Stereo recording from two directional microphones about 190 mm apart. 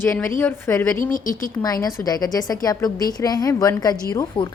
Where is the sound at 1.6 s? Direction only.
20° left (ahead or behind).